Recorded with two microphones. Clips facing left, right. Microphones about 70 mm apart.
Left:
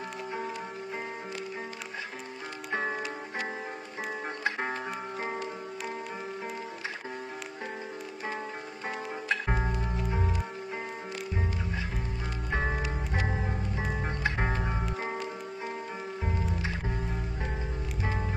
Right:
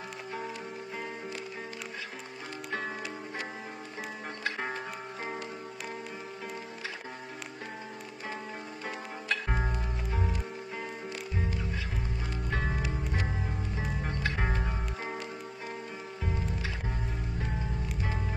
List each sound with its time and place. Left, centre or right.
2.7 s music: left
4.5 s music: centre
8.8 s music: left
12.5 s music: left